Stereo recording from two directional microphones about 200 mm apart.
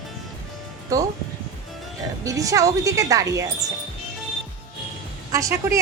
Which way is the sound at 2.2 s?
15° right (ahead or behind).